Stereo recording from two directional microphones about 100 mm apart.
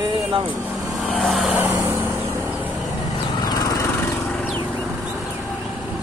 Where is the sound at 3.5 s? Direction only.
40° left (ahead or behind).